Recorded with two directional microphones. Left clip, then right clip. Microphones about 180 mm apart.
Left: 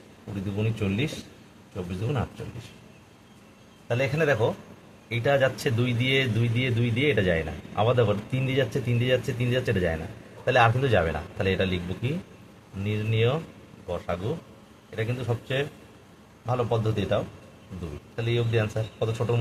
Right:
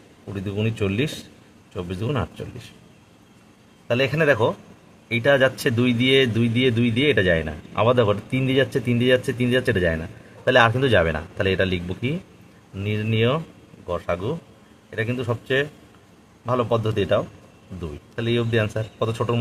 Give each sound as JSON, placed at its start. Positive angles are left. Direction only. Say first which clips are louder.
{"t": 0.6, "sound": "speech", "louder": "right 5 dB", "side_deg": -60}
{"t": 3.8, "sound": "a man's voice", "louder": "right 5 dB", "side_deg": -65}
{"t": 18.2, "sound": "speech", "louder": "right 5 dB", "side_deg": -60}